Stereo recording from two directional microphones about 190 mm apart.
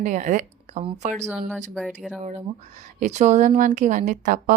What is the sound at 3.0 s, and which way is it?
Speech, 40° right (ahead or behind).